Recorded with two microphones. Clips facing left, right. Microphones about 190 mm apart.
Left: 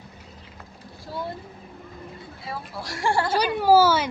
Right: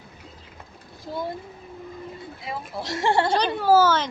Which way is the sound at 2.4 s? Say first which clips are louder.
Right 2 dB; 20° right (ahead or behind).